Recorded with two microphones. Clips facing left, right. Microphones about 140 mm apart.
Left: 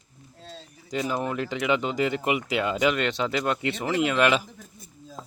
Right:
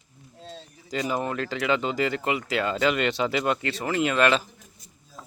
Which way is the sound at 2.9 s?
5° right (ahead or behind).